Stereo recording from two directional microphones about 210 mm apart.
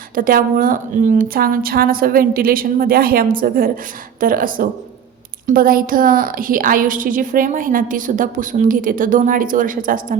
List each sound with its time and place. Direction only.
0.1 s a woman's voice: 40° right (ahead or behind)